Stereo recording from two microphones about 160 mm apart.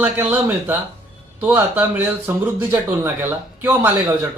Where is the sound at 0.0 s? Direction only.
10° right (ahead or behind).